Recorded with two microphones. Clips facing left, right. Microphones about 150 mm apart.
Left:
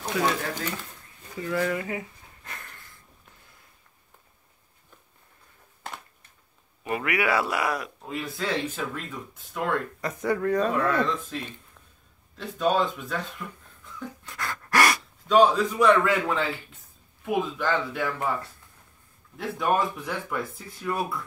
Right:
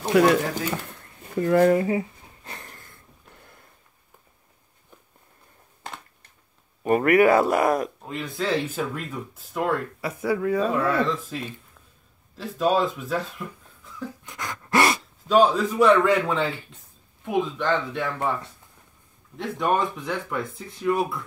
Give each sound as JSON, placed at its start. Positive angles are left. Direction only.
{"t": 0.0, "sound": "speech", "side_deg": -65}
{"t": 0.8, "sound": "a sound", "side_deg": -55}
{"t": 6.8, "sound": "speech", "side_deg": -45}
{"t": 8.0, "sound": "speech", "side_deg": 0}
{"t": 14.2, "sound": "dog", "side_deg": -20}
{"t": 15.2, "sound": "speech", "side_deg": -5}
{"t": 19.3, "sound": "speech", "side_deg": 0}